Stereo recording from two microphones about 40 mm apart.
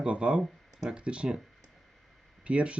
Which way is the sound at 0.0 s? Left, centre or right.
Right.